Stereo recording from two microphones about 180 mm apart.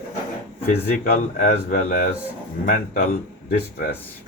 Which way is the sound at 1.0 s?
45° left (ahead or behind).